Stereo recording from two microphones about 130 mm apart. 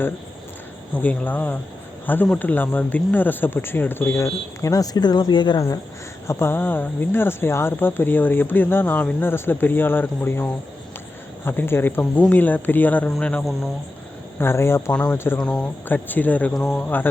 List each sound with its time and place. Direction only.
0.9 s speech: 15° left (ahead or behind); by 5.8 s 30° left (ahead or behind)
6.2 s speech: 20° left (ahead or behind)
15.4 s speech: 5° left (ahead or behind)